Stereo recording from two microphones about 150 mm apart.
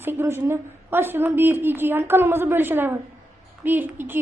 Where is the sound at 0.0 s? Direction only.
15° right (ahead or behind).